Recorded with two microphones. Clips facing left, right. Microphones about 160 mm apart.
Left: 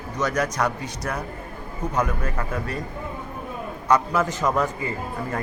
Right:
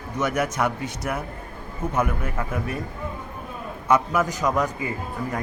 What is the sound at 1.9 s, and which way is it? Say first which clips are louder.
Speech: even; 10° right (ahead or behind).